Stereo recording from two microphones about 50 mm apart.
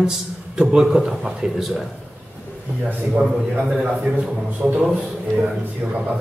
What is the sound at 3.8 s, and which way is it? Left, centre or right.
Speech, right.